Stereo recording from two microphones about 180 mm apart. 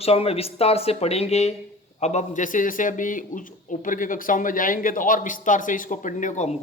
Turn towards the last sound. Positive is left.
turn(degrees=40)  # may be behind; listen again after turning